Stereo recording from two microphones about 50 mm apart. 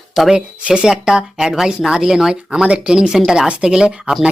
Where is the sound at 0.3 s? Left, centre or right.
Centre.